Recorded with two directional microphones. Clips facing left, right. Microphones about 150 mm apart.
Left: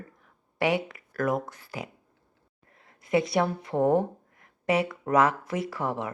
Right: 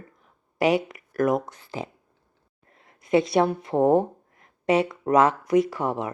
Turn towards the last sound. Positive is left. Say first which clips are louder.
# right 7 dB
turn(degrees=-20)  # may be behind; listen again after turning